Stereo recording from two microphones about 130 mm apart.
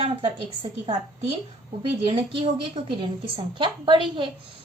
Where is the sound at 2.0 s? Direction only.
45° right (ahead or behind).